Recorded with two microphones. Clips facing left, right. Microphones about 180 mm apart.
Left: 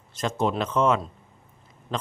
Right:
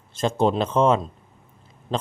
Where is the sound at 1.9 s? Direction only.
30° right (ahead or behind).